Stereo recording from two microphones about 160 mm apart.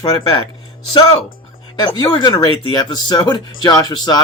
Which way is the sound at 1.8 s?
30° left (ahead or behind).